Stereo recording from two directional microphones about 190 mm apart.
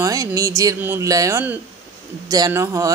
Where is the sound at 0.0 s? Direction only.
15° right (ahead or behind).